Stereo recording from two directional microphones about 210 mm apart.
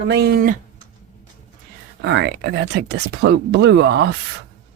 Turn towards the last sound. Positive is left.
turn(degrees=-55)  # may be behind; listen again after turning